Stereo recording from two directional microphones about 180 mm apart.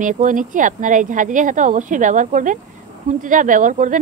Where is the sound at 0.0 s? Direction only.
45° right (ahead or behind).